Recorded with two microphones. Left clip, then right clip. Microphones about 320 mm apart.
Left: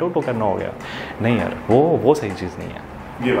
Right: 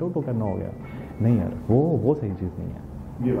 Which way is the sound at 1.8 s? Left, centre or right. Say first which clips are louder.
Left 8 dB; left.